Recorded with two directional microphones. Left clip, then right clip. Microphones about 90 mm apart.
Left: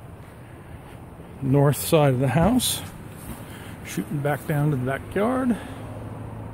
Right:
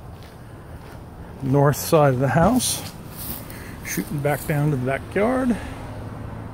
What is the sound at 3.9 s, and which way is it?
Speech, 15° left (ahead or behind).